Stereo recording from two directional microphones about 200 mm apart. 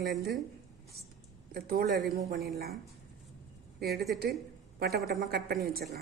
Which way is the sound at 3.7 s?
50° right (ahead or behind).